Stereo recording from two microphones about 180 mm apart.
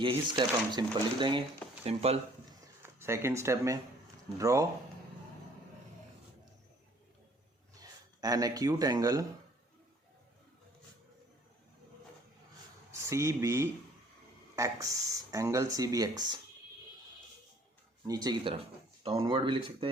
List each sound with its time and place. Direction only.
0.3 s speech: 25° right (ahead or behind)
2.5 s a sound: 15° right (ahead or behind)
4.4 s speech: 20° right (ahead or behind)
7.8 s speech: 20° right (ahead or behind)
13.0 s speech: 15° right (ahead or behind)
18.0 s speech: 20° right (ahead or behind)